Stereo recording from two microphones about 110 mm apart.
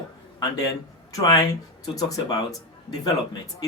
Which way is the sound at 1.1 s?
30° left (ahead or behind).